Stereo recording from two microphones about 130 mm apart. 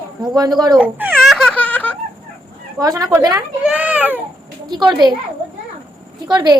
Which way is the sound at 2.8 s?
30° right (ahead or behind).